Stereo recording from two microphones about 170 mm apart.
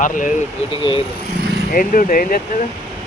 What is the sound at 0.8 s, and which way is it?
Speech, 30° left (ahead or behind).